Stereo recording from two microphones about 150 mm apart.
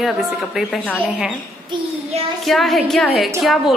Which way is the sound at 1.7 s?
30° right (ahead or behind).